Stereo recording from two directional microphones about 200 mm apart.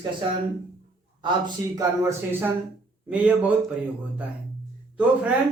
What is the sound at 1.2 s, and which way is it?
Speech, 20° right (ahead or behind).